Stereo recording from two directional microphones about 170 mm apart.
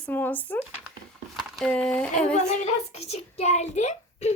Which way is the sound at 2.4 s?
45° left (ahead or behind).